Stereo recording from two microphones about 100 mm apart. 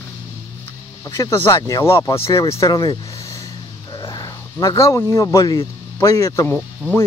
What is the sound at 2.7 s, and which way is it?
Vehicle, 40° left (ahead or behind).